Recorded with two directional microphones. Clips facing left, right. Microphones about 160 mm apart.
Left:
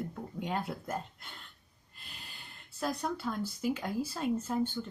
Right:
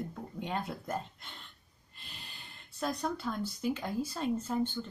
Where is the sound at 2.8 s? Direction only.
5° left (ahead or behind).